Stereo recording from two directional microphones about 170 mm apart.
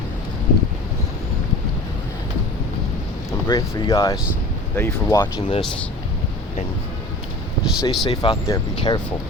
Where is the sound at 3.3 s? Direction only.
15° left (ahead or behind).